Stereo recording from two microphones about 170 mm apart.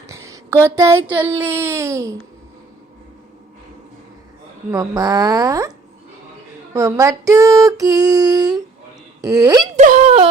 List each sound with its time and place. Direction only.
0.1 s speech: 15° right (ahead or behind)
4.7 s female singing: 20° right (ahead or behind)
6.7 s female singing: 15° right (ahead or behind)
9.7 s speech: 45° right (ahead or behind)